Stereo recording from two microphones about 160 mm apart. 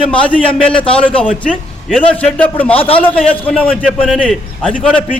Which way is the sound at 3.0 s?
10° left (ahead or behind).